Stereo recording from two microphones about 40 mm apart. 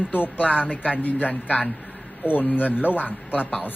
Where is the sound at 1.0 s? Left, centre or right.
Left.